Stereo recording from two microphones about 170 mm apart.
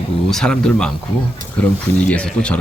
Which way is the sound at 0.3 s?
5° left (ahead or behind).